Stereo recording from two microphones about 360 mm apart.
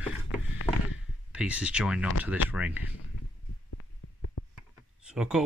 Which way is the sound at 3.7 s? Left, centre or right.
Left.